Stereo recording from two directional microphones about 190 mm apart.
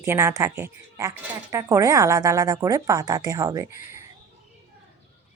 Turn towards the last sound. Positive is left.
turn(degrees=-15)  # may be behind; listen again after turning